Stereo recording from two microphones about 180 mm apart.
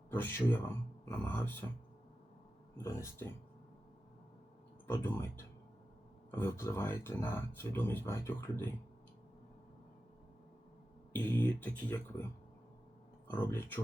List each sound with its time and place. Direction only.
0.1 s speech: 10° left (ahead or behind)
2.8 s speech: 15° left (ahead or behind)
4.9 s speech: 15° left (ahead or behind)
11.1 s speech: 10° left (ahead or behind)
13.2 s speech: 10° left (ahead or behind)